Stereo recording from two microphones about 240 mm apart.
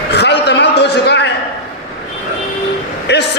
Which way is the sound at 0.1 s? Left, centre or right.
Left.